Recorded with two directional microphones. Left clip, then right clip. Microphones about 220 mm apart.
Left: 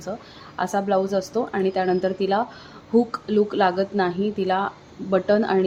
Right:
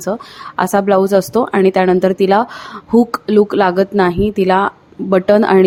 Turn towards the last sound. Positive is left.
turn(degrees=-35)  # may be behind; listen again after turning